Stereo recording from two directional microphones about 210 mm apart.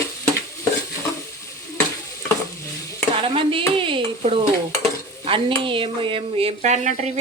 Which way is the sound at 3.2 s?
25° right (ahead or behind).